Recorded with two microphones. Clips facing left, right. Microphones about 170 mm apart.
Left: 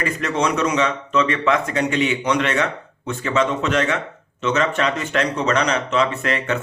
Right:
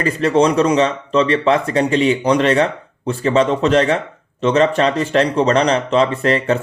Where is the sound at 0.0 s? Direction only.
30° right (ahead or behind).